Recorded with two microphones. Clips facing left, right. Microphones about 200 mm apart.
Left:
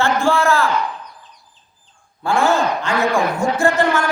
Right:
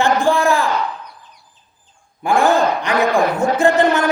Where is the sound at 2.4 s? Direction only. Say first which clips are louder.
Right 2 dB; 15° right (ahead or behind).